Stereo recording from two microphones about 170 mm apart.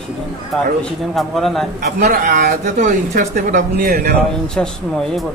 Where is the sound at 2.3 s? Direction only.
50° right (ahead or behind).